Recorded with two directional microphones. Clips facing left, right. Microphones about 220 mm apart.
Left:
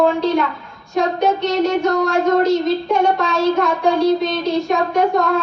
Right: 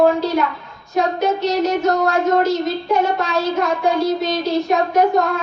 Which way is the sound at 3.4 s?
Centre (ahead or behind).